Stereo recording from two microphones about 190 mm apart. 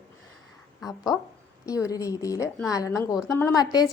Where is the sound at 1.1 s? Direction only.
20° left (ahead or behind).